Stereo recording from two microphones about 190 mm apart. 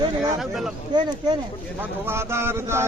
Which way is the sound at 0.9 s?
20° right (ahead or behind).